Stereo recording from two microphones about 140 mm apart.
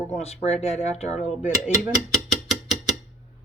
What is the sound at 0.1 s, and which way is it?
Speech, 50° left (ahead or behind).